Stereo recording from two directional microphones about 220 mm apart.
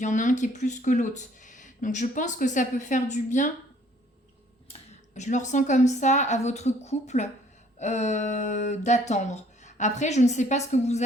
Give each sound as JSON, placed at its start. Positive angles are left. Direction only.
{"t": 0.0, "sound": "speech", "side_deg": 35}
{"t": 4.7, "sound": "speech", "side_deg": 30}